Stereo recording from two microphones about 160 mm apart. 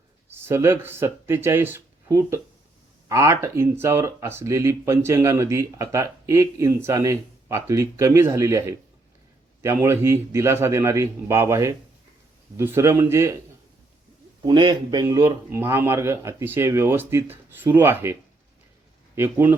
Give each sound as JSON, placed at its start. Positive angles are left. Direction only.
{"t": 0.3, "sound": "speech", "side_deg": -15}
{"t": 14.4, "sound": "speech", "side_deg": -30}